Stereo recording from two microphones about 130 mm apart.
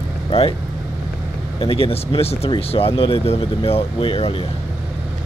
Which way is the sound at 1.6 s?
45° left (ahead or behind).